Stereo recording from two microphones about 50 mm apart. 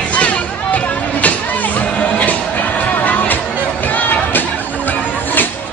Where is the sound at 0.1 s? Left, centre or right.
Left.